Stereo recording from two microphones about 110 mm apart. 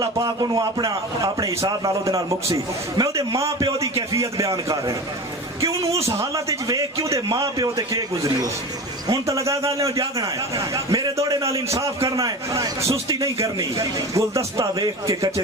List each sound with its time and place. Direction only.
0.0 s a man's voice: 35° right (ahead or behind)